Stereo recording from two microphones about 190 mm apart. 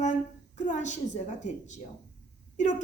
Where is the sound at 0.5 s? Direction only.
40° left (ahead or behind).